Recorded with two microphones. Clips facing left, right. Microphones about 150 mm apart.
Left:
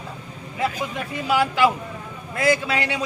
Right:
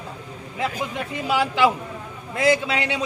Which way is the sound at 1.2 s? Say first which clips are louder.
Left 1 dB; 25° right (ahead or behind).